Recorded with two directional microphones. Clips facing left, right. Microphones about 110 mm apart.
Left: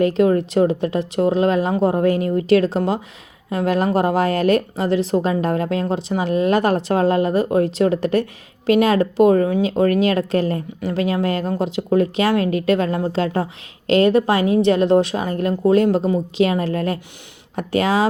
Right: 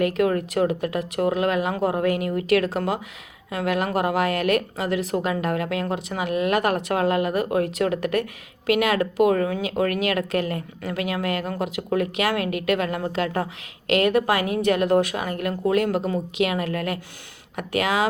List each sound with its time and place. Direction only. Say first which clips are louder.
0.0 s speech: left 5 dB; 25° left (ahead or behind)